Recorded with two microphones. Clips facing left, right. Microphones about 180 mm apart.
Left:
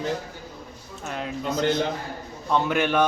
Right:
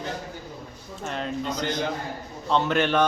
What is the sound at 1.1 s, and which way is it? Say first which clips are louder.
A man's voice: even; 5° left (ahead or behind).